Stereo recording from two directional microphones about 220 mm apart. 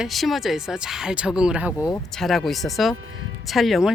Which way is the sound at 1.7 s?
15° left (ahead or behind).